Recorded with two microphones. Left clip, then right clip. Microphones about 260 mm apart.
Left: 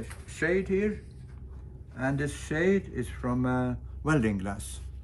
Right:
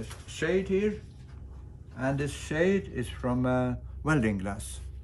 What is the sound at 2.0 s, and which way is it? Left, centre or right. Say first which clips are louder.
Speech: even; centre.